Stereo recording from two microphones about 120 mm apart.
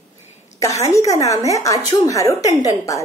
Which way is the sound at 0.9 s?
25° left (ahead or behind).